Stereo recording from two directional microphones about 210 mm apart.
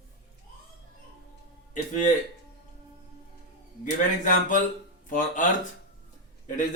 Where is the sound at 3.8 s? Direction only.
40° left (ahead or behind).